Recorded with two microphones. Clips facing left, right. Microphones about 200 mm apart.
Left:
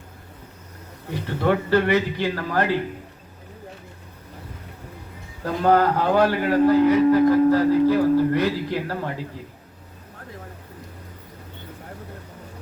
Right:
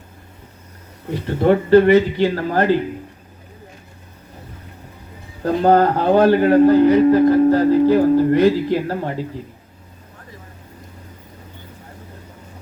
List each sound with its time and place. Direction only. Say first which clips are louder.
1.3 s a man's voice: right 8 dB; 35° right (ahead or behind)
1.9 s a man's voice: right 8 dB; 25° right (ahead or behind)
5.4 s a man's voice: right 5 dB; 35° right (ahead or behind)
8.4 s a man's voice: right 8 dB; 40° right (ahead or behind)